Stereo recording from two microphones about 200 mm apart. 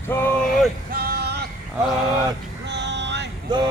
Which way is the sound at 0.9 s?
50° right (ahead or behind).